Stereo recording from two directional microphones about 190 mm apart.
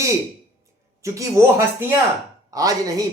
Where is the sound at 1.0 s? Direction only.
15° right (ahead or behind).